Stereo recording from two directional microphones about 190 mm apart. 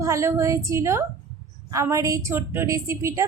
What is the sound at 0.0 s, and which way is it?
A woman's voice, 15° right (ahead or behind).